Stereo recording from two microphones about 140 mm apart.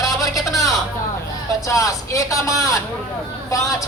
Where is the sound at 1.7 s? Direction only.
25° left (ahead or behind).